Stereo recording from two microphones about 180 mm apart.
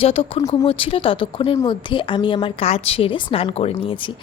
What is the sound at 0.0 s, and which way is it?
A woman's voice, 30° left (ahead or behind).